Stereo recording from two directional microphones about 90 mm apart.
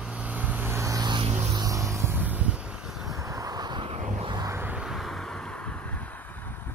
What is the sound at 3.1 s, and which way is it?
Vehicle, 35° right (ahead or behind).